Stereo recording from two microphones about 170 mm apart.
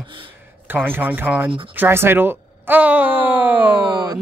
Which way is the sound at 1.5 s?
30° right (ahead or behind).